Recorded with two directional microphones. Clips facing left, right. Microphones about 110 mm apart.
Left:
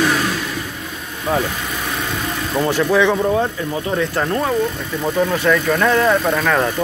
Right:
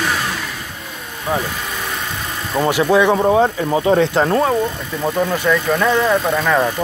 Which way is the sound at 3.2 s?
25° right (ahead or behind).